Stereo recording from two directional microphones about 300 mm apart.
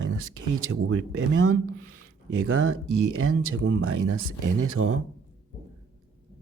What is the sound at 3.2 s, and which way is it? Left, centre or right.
Speech, right.